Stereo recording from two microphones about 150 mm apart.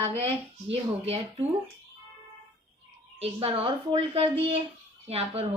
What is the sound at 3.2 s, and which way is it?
A woman's voice, 40° right (ahead or behind).